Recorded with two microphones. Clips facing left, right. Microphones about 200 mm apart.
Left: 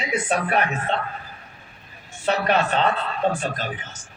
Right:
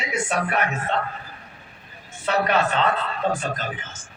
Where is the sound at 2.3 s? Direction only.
30° left (ahead or behind).